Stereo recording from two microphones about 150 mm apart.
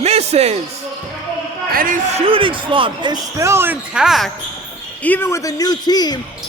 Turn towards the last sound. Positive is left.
turn(degrees=25)  # may be behind; listen again after turning